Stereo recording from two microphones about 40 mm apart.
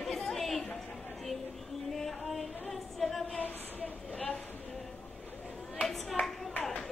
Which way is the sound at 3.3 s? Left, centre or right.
Left.